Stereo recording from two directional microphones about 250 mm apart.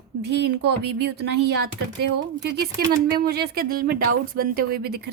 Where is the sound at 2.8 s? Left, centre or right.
Right.